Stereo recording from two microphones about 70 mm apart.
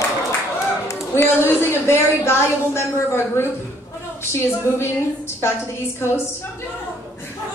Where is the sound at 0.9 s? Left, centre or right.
Left.